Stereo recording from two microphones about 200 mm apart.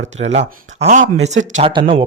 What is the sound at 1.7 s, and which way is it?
Speech, 25° right (ahead or behind).